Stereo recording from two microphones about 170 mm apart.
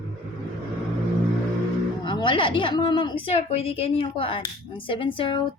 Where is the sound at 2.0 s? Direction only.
30° left (ahead or behind).